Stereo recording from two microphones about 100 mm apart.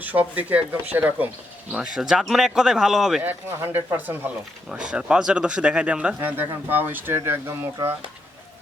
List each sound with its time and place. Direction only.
0.0 s speech: 15° right (ahead or behind)
1.7 s speech: 5° right (ahead or behind)
3.2 s speech: 20° right (ahead or behind)
4.7 s speech: 10° right (ahead or behind)